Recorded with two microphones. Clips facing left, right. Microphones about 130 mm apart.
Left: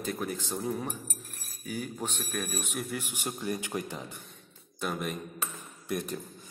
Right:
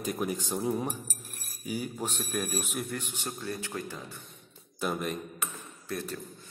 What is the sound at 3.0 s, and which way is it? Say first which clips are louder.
Speech: left 2 dB; 10° left (ahead or behind).